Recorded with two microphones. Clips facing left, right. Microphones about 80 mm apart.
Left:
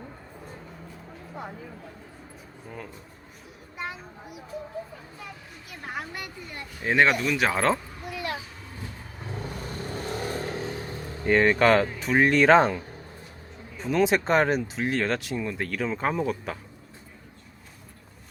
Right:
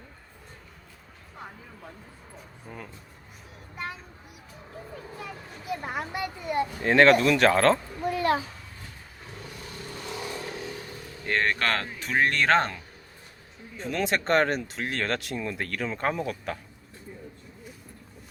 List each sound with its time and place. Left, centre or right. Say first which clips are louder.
2.6 s speech: left 2 dB; centre
5.8 s speech: even; centre
6.8 s speech: right 3 dB; centre
8.1 s a child's voice: right 8 dB; right
9.6 s vehicle: left 4 dB; left
11.3 s speech: left 7 dB; centre